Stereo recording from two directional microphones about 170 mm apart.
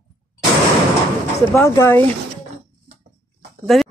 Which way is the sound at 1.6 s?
15° left (ahead or behind).